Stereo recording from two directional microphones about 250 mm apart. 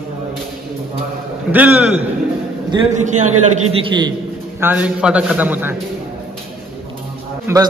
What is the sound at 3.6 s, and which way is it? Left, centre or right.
Speech, centre.